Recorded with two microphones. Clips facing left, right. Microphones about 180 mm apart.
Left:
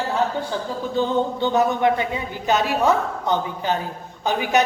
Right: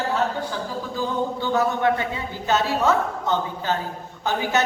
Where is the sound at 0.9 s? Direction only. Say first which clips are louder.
Left 5 dB; 20° left (ahead or behind).